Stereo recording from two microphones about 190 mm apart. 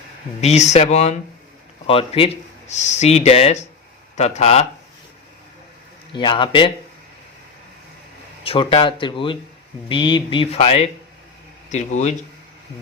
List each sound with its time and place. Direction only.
0.4 s speech: 35° left (ahead or behind)
6.1 s speech: 25° left (ahead or behind)
8.4 s speech: 30° left (ahead or behind)